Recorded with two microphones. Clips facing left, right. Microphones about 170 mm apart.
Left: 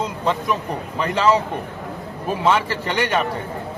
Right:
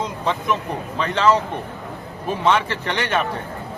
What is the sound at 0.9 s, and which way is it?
Speech, 10° left (ahead or behind).